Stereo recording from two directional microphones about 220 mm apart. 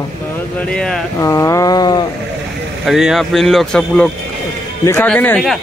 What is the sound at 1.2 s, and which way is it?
Speech, 15° left (ahead or behind).